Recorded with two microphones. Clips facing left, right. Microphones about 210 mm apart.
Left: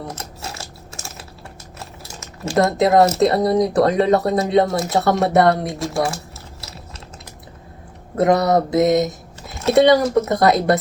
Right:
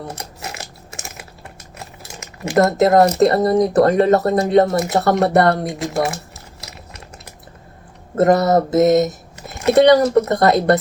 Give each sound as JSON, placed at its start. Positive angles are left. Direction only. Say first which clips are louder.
{"t": 0.2, "sound": "biting", "louder": "right 1 dB", "side_deg": -15}
{"t": 2.6, "sound": "speech", "louder": "right 2 dB", "side_deg": 0}
{"t": 5.8, "sound": "speech", "louder": "right 1 dB", "side_deg": -20}
{"t": 8.1, "sound": "speech", "louder": "right 2 dB", "side_deg": 0}